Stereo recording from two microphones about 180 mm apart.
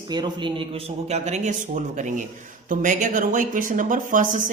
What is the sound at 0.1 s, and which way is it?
Speech, 25° right (ahead or behind).